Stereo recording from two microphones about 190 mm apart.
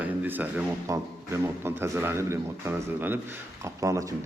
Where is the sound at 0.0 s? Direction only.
10° right (ahead or behind).